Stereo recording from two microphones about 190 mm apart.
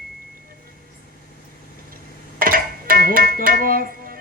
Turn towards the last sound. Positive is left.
turn(degrees=-50)  # may be behind; listen again after turning